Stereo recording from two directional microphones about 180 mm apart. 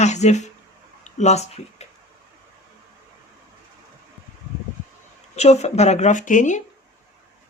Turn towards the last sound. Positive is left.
turn(degrees=45)  # may be behind; listen again after turning